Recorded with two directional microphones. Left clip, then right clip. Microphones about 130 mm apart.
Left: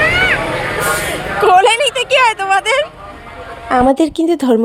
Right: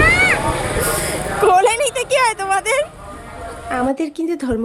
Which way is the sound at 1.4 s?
5° right (ahead or behind).